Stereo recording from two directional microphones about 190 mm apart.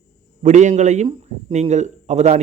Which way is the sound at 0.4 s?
40° right (ahead or behind).